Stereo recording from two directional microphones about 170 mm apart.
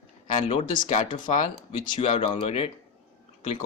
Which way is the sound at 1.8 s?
30° left (ahead or behind).